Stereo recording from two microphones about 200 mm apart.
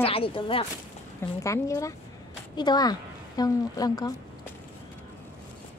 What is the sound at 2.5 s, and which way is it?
A woman's voice, 20° left (ahead or behind).